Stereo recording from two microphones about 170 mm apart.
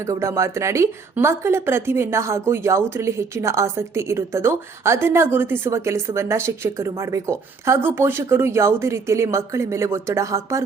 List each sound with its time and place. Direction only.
0.1 s a woman's voice: 15° right (ahead or behind)